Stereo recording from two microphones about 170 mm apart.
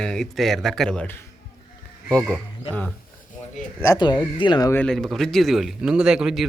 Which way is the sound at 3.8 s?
25° left (ahead or behind).